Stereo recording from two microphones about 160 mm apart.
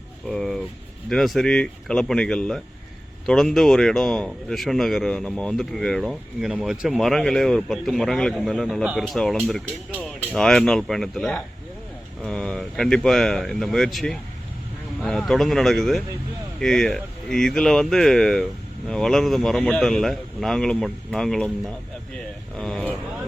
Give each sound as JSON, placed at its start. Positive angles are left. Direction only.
{"t": 0.3, "sound": "speech", "side_deg": 0}
{"t": 22.5, "sound": "speech", "side_deg": 5}